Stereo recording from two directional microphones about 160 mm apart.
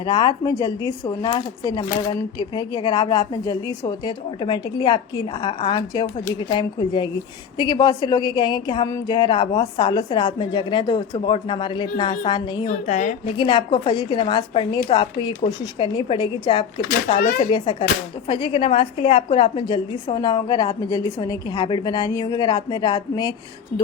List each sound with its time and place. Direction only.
0.0 s a woman's voice: 25° left (ahead or behind)
12.6 s a woman's voice: 45° left (ahead or behind)
13.3 s a woman's voice: 30° left (ahead or behind)
17.2 s speech: 55° left (ahead or behind)
17.5 s a woman's voice: 30° left (ahead or behind)